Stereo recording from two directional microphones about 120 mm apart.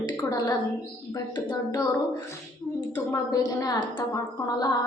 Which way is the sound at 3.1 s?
30° left (ahead or behind).